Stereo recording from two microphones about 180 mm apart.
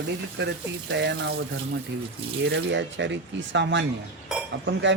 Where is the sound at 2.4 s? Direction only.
80° right.